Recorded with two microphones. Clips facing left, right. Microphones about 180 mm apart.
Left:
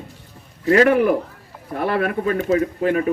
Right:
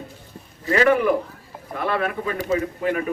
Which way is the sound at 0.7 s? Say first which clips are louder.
Left 3 dB; 50° left (ahead or behind).